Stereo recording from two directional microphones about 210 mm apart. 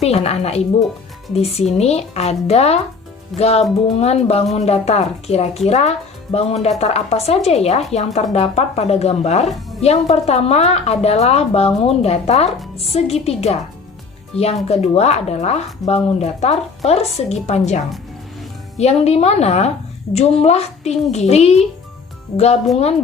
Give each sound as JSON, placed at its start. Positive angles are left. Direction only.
{"t": 0.0, "sound": "a woman's voice", "side_deg": 30}